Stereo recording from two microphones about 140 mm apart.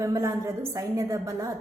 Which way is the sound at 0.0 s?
20° right (ahead or behind).